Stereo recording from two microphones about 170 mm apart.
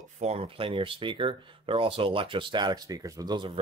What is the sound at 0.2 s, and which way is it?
Speech, 35° right (ahead or behind).